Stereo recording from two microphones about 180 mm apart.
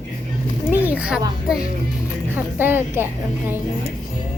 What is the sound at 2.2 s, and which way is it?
A woman's voice, 10° right (ahead or behind).